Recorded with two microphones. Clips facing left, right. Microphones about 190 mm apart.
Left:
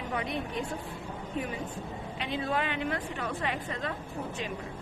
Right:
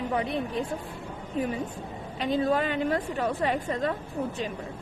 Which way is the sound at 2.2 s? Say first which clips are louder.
Right 7 dB; 40° right (ahead or behind).